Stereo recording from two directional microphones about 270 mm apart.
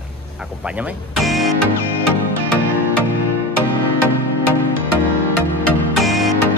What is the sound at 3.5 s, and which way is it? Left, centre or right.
Music, left.